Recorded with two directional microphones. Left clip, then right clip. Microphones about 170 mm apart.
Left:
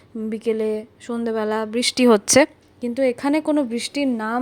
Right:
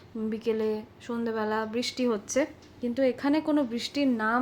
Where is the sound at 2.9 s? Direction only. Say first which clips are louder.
Left 6 dB; 45° left (ahead or behind).